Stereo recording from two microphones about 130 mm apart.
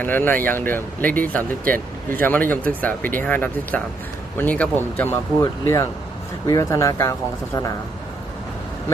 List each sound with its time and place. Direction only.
0.0 s speech: 15° left (ahead or behind)
1.7 s speech: 90° right
2.2 s speech: 15° left (ahead or behind)